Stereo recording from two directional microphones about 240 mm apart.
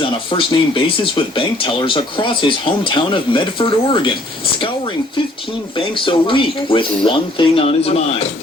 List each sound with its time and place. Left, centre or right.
0.0 s speech: left
5.7 s speech: left